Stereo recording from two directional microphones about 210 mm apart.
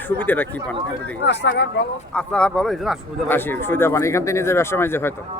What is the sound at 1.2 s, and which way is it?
Speech, 55° left (ahead or behind).